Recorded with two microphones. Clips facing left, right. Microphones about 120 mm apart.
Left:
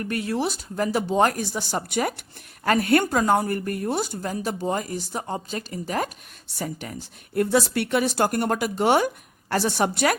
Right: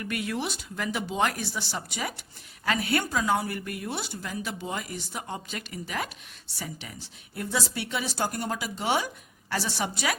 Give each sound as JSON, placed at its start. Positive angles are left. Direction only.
{"t": 0.0, "sound": "speech", "side_deg": 40}